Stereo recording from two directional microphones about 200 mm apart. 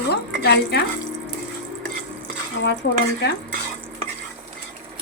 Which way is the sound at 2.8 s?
50° left (ahead or behind).